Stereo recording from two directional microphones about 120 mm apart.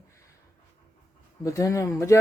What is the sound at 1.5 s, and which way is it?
Speech, 25° left (ahead or behind).